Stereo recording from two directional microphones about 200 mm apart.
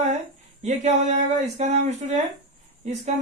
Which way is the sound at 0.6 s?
35° right (ahead or behind).